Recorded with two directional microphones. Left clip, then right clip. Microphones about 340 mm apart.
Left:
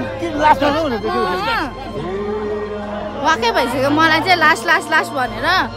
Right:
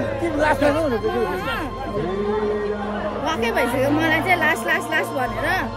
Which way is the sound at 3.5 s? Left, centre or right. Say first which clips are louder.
Left 4 dB; centre.